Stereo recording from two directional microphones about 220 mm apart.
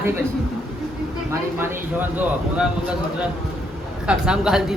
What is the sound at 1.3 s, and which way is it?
Speech, 10° right (ahead or behind).